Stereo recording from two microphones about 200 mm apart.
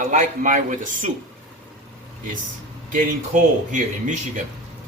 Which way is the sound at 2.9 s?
40° right (ahead or behind).